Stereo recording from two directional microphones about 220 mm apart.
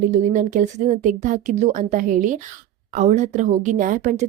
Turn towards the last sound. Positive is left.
turn(degrees=-35)  # may be behind; listen again after turning